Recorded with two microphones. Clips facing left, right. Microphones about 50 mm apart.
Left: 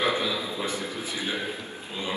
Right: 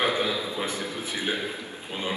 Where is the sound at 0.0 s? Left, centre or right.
Right.